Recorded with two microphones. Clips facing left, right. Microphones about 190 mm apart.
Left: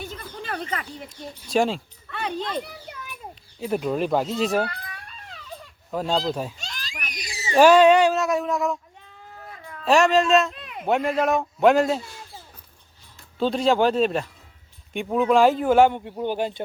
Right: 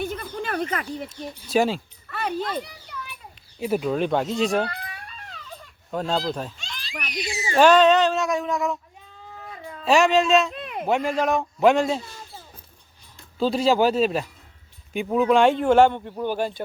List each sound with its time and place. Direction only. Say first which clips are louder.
0.0 s a sound: right 6 dB; 55° right (ahead or behind)
1.5 s speech: right 1 dB; 5° right (ahead or behind)
3.6 s a man's voice: right 1 dB; centre (ahead or behind)
5.9 s a man's voice: left 1 dB; 5° left (ahead or behind)
6.6 s screaming: right 2 dB; 45° left (ahead or behind)
7.4 s speech: left 2 dB; 10° left (ahead or behind)
9.8 s a man's voice: even; centre (ahead or behind)
10.6 s a sound: right 6 dB; 50° right (ahead or behind)
10.8 s a man's voice: left 1 dB; centre (ahead or behind)
13.4 s a man's voice: even; 5° right (ahead or behind); by 16.6 s 20° left (ahead or behind)